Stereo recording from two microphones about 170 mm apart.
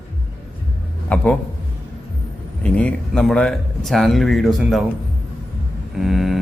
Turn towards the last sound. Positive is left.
turn(degrees=0)  # may be behind; listen again after turning